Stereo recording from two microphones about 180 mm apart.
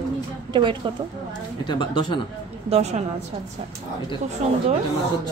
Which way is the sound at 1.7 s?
25° left (ahead or behind).